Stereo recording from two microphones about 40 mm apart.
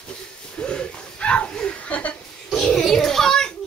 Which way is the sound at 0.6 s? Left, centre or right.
Left.